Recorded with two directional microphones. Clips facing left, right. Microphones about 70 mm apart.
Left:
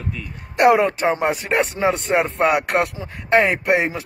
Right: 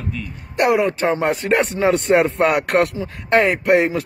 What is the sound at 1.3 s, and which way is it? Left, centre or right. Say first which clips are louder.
A man's voice: right 2 dB; centre.